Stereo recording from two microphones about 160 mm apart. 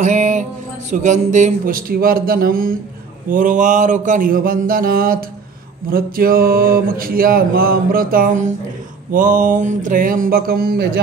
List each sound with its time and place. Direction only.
0.0 s speech: 50° right (ahead or behind); by 10.9 s 70° right (ahead or behind)